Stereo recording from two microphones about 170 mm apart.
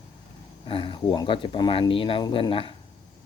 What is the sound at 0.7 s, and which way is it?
Speech, 30° left (ahead or behind).